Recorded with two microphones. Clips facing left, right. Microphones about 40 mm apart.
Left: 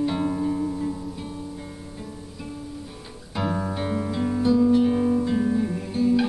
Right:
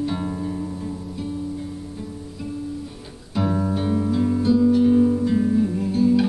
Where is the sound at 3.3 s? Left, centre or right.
Centre.